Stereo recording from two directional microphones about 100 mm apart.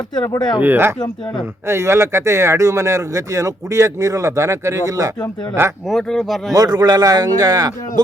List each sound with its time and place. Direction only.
0.1 s speech: 45° left (ahead or behind)
0.6 s speech: 20° right (ahead or behind)
5.6 s speech: 25° right (ahead or behind)
5.9 s speech: centre (ahead or behind)
6.5 s speech: 40° right (ahead or behind)